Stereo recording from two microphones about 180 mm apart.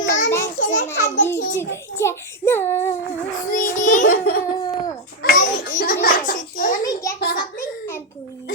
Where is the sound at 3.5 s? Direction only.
45° left (ahead or behind).